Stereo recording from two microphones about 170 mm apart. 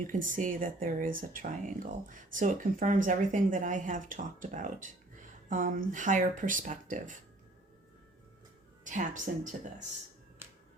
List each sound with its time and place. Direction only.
0.1 s speech: 50° right (ahead or behind)
8.8 s speech: 50° right (ahead or behind)
10.4 s music: 10° right (ahead or behind)